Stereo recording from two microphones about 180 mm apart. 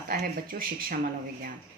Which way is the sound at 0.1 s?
50° right (ahead or behind).